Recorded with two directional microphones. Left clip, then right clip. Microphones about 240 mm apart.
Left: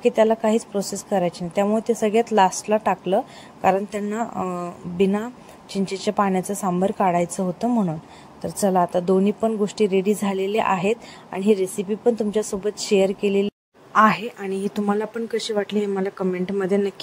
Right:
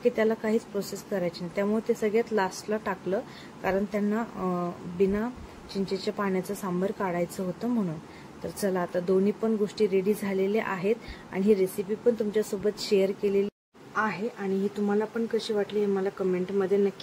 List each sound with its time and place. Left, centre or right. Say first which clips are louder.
0.0 s speech: left 8 dB; left
8.5 s speech: left 9 dB; left